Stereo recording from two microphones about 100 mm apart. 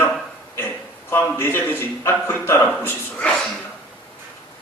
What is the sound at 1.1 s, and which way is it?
A man's voice, 25° left (ahead or behind).